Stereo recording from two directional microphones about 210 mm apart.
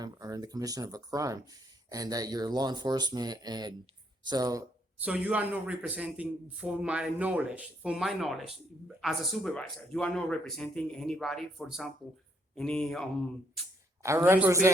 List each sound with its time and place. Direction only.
0.0 s a man's voice: 15° right (ahead or behind)
5.0 s a man's voice: 5° right (ahead or behind)
14.0 s a man's voice: 15° right (ahead or behind)